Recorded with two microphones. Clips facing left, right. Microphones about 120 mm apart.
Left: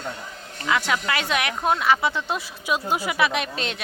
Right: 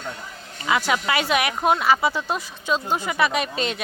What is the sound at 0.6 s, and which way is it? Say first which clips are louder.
Speech: right 2 dB; 5° right (ahead or behind).